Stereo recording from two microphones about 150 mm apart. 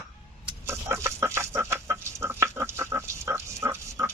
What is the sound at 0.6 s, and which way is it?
Chicken, 15° right (ahead or behind).